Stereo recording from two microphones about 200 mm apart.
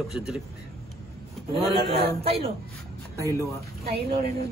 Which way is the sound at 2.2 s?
30° right (ahead or behind).